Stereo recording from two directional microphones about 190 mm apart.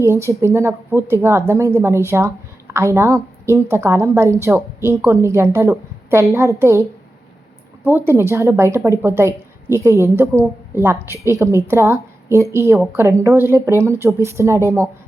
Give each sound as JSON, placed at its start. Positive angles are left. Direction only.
{"t": 0.3, "sound": "a woman's voice", "side_deg": -15}
{"t": 7.9, "sound": "a woman's voice", "side_deg": -10}